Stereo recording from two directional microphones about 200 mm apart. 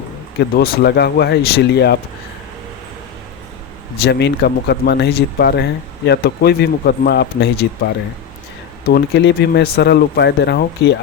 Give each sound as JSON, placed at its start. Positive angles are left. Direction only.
{"t": 0.3, "sound": "speech", "side_deg": 50}
{"t": 4.0, "sound": "speech", "side_deg": 55}
{"t": 8.9, "sound": "speech", "side_deg": 55}